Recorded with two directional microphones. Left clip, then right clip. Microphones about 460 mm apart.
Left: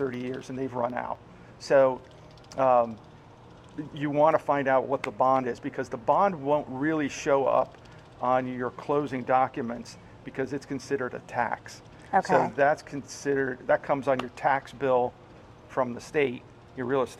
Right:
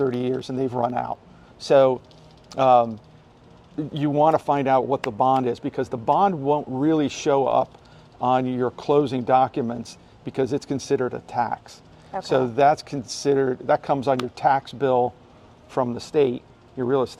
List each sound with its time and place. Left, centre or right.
0.5 s speech: right
3.9 s speech: right